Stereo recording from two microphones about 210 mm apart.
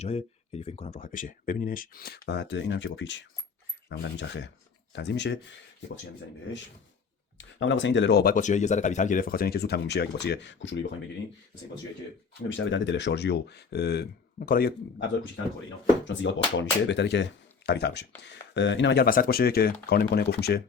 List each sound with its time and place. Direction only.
0.0 s speech: 30° left (ahead or behind); by 5.5 s 55° left (ahead or behind)
7.3 s speech: 60° left (ahead or behind)
12.5 s speech: 60° left (ahead or behind); by 14.7 s 45° left (ahead or behind)
16.0 s speech: 60° left (ahead or behind)